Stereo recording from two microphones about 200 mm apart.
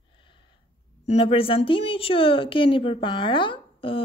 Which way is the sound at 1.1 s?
30° left (ahead or behind).